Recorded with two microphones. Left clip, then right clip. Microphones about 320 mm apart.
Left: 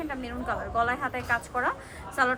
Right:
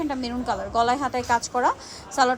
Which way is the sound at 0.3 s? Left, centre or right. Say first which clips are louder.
Right 5 dB; centre.